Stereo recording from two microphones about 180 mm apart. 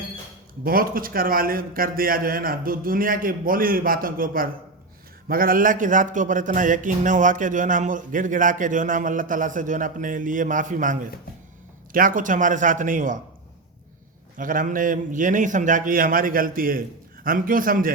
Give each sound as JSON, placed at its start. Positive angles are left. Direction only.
{"t": 0.6, "sound": "a man's voice", "side_deg": -55}
{"t": 14.3, "sound": "a man's voice", "side_deg": -50}